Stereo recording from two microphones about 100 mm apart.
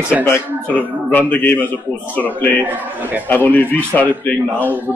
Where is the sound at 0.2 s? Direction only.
20° left (ahead or behind).